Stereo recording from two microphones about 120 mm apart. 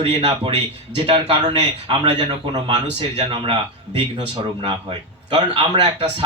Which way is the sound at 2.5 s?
40° right (ahead or behind).